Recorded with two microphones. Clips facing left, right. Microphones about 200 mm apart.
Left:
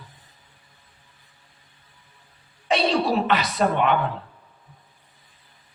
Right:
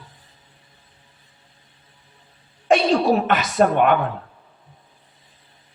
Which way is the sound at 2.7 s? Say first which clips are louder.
Right 5 dB; 50° right (ahead or behind).